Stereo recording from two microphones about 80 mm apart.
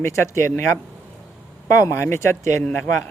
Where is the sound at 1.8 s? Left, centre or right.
Left.